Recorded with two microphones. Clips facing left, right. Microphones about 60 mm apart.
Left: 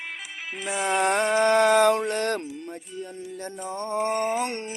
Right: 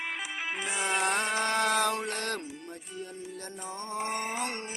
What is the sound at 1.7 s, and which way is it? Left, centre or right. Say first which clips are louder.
Mantra: left 9 dB; left.